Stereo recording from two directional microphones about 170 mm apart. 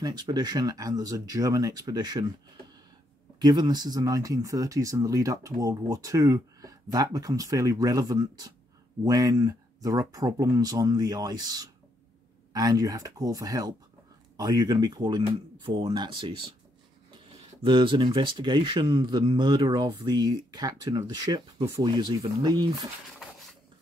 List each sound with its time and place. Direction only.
0.0 s speech: 25° right (ahead or behind)
3.3 s speech: 25° right (ahead or behind)
17.6 s speech: 30° right (ahead or behind)